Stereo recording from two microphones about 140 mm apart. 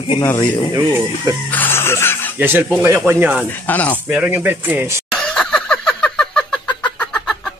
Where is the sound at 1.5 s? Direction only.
15° left (ahead or behind).